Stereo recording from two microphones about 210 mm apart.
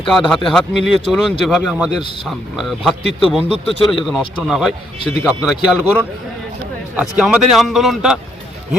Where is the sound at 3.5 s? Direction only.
30° left (ahead or behind).